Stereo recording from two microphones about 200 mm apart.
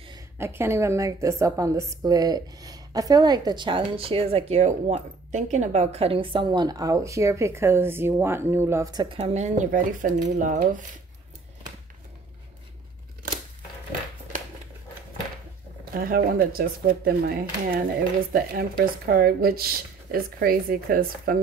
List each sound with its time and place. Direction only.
0.0 s a woman's voice: 15° right (ahead or behind); by 10.8 s 40° right (ahead or behind)
15.9 s speech: 45° right (ahead or behind)